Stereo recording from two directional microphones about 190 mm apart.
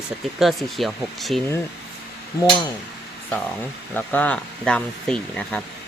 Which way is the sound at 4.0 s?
10° left (ahead or behind).